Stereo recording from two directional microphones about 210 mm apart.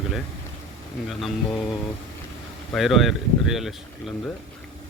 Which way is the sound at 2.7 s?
Centre (ahead or behind).